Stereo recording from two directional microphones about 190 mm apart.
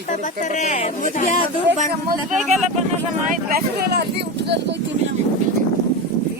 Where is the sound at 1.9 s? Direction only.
50° right (ahead or behind).